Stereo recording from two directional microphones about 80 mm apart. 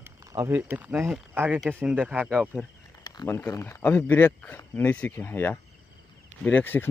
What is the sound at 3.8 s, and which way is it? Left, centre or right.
Speech, left.